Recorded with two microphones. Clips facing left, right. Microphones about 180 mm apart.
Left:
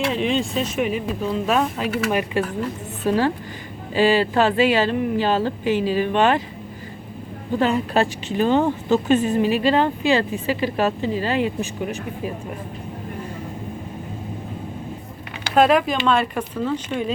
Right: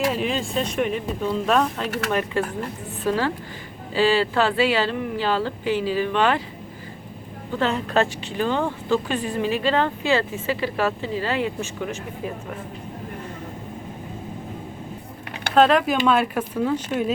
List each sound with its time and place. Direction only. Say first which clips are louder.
0.1 s a woman's voice: left 3 dB; centre (ahead or behind); by 6.4 s 20° left (ahead or behind)
7.6 s a woman's voice: left 2 dB; 15° left (ahead or behind)
15.5 s a woman's voice: left 1 dB; 10° left (ahead or behind)
15.9 s speech: even; 5° right (ahead or behind)